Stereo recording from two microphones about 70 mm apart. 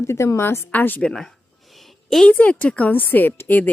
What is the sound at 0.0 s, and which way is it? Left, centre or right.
Speech, left.